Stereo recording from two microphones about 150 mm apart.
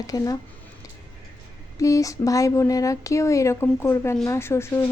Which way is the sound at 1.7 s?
20° left (ahead or behind).